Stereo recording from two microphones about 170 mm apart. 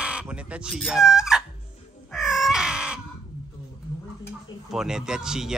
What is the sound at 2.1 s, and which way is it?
Crow, centre (ahead or behind).